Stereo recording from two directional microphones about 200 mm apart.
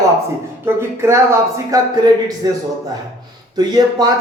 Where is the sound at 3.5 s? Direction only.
20° right (ahead or behind).